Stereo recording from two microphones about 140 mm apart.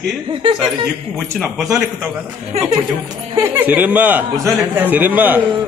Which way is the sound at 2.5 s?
50° right (ahead or behind).